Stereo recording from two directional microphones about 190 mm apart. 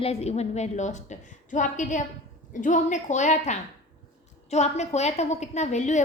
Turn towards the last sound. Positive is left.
turn(degrees=40)  # may be behind; listen again after turning